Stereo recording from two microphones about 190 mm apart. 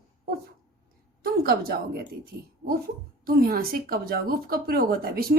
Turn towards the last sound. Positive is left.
turn(degrees=-55)  # may be behind; listen again after turning